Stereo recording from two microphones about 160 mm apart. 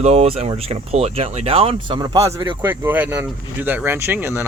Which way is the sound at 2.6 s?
10° right (ahead or behind).